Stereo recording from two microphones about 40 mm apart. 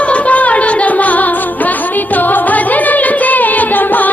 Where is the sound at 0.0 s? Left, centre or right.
Left.